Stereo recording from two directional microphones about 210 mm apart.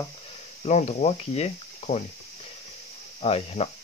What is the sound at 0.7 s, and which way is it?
Speech, 30° left (ahead or behind).